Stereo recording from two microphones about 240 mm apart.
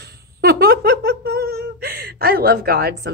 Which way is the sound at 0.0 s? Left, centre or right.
Right.